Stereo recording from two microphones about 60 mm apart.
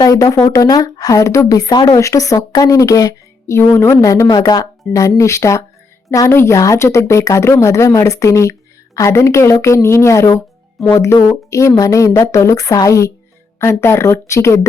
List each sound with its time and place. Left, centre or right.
0.0 s speech: left
3.5 s a woman's voice: left
6.7 s speech: left
13.6 s speech: left